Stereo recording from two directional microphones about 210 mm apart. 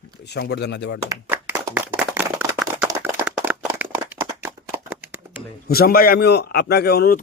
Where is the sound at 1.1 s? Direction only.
10° right (ahead or behind).